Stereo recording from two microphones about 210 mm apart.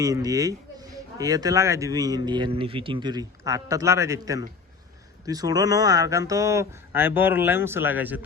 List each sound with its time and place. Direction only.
0.0 s speech: 15° right (ahead or behind)